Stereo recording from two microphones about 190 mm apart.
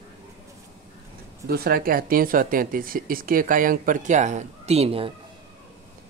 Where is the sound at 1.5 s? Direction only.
55° right (ahead or behind); by 5.1 s 30° right (ahead or behind).